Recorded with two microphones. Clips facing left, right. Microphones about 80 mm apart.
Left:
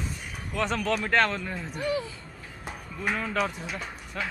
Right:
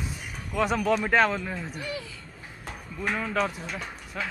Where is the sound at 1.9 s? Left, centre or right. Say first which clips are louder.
Left 6 dB; left.